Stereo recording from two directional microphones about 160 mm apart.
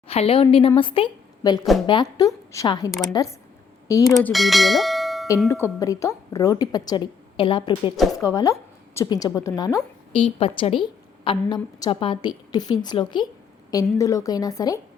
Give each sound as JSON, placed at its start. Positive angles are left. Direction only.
{"t": 0.1, "sound": "a woman's voice", "side_deg": 35}
{"t": 4.3, "sound": "bell", "side_deg": 0}
{"t": 5.5, "sound": "a woman's voice", "side_deg": 15}
{"t": 8.2, "sound": "a woman's voice", "side_deg": 20}
{"t": 10.1, "sound": "a woman's voice", "side_deg": 35}